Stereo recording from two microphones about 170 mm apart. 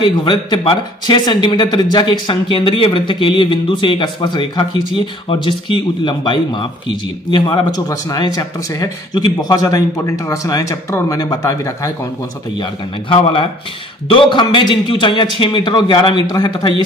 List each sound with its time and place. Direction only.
0.0 s speech: 30° left (ahead or behind)
13.1 s speech: 30° left (ahead or behind)